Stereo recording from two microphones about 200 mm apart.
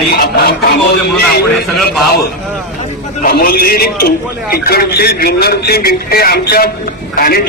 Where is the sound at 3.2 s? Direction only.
50° left (ahead or behind).